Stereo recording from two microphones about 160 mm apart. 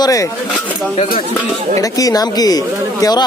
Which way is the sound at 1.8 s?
20° left (ahead or behind).